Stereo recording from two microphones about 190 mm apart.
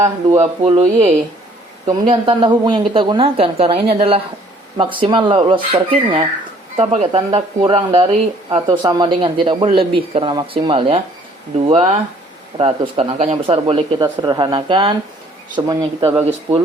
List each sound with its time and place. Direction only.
0.3 s speech: 35° right (ahead or behind)